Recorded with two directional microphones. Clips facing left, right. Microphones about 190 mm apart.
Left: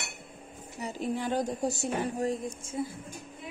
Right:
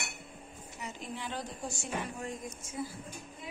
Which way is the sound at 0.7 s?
35° left (ahead or behind).